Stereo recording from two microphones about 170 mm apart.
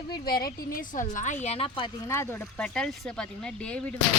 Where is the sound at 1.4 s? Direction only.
35° left (ahead or behind).